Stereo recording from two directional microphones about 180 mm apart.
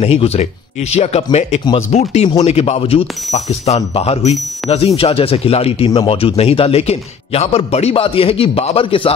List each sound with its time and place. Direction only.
0.0 s speech: 35° left (ahead or behind)